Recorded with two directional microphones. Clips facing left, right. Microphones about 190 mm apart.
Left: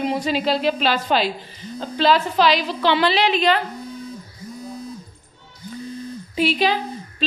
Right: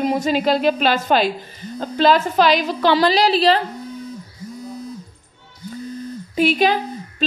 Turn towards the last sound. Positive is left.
turn(degrees=-45)  # may be behind; listen again after turning